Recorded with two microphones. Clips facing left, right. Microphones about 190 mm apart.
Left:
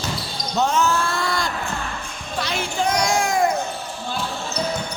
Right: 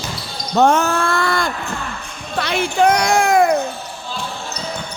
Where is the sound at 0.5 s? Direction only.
55° right (ahead or behind).